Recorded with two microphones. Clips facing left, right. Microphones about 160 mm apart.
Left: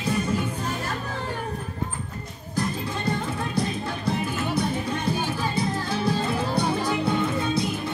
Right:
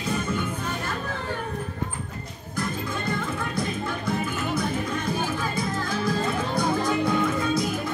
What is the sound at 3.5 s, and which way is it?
Music, 35° left (ahead or behind).